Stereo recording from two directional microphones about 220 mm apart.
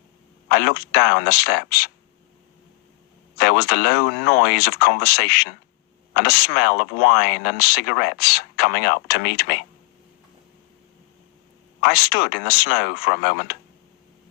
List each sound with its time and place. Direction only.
0.4 s speech: 45° left (ahead or behind)
3.3 s speech: 45° left (ahead or behind)
11.8 s speech: 45° left (ahead or behind)